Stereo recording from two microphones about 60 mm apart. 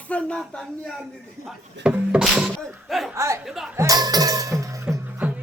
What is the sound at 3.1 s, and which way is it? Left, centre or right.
Speech, right.